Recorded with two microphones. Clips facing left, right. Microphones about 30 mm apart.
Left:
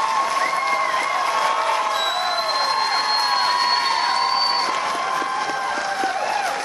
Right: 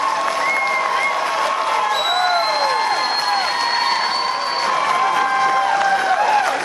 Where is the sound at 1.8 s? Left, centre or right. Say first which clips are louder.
Right 3 dB; right.